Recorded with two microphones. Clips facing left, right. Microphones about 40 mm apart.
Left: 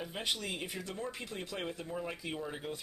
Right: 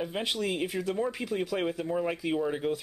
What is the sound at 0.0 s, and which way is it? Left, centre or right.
Speech, centre.